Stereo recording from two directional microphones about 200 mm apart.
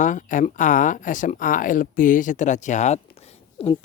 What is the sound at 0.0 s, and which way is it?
Speech, 40° left (ahead or behind).